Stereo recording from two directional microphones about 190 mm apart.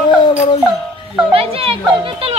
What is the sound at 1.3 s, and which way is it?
Speech, 30° right (ahead or behind).